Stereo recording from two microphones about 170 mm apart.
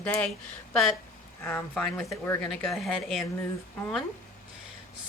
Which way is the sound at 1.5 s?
10° left (ahead or behind).